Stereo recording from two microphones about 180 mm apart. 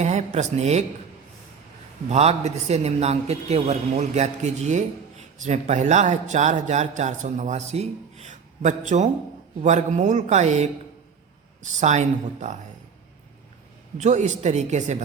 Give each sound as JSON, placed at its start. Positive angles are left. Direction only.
{"t": 0.0, "sound": "speech", "side_deg": -40}
{"t": 2.0, "sound": "a man's voice", "side_deg": -35}
{"t": 11.8, "sound": "a man's voice", "side_deg": -40}
{"t": 14.0, "sound": "a man's voice", "side_deg": -40}